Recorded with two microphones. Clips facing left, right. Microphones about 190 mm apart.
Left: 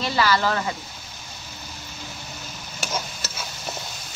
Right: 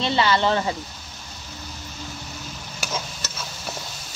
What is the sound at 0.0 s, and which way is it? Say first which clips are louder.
Speech: right 1 dB; 25° right (ahead or behind).